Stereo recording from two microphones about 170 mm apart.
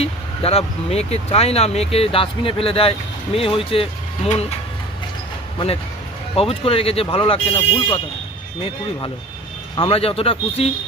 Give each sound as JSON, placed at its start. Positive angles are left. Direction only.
{"t": 0.0, "sound": "speech", "side_deg": 35}
{"t": 6.3, "sound": "speech", "side_deg": 35}
{"t": 9.7, "sound": "speech", "side_deg": 35}